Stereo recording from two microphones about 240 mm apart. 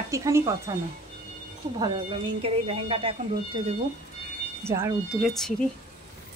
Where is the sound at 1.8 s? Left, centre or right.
Right.